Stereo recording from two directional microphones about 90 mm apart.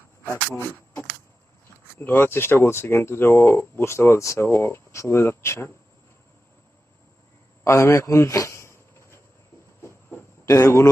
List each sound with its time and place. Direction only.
0.3 s speech: 25° left (ahead or behind)
7.6 s a sound: 30° left (ahead or behind)
10.4 s speech: 35° left (ahead or behind)